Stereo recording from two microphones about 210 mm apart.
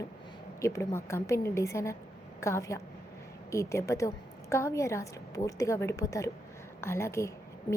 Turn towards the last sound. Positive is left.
turn(degrees=15)  # may be behind; listen again after turning